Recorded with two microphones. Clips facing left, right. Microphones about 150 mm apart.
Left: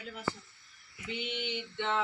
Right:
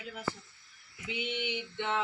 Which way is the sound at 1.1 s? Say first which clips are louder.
Right 1 dB; 10° right (ahead or behind).